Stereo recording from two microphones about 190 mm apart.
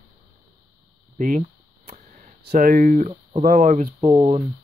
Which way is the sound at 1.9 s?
55° right (ahead or behind).